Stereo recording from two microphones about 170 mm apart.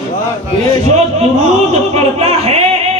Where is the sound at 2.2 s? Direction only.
35° right (ahead or behind).